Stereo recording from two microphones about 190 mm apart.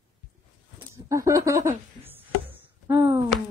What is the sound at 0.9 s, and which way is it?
Speech, 15° right (ahead or behind).